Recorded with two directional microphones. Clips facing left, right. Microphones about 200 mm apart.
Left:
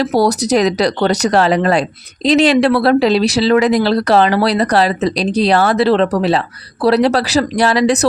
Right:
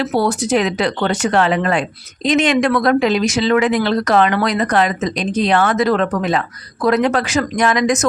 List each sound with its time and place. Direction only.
0.0 s speech: 40° left (ahead or behind)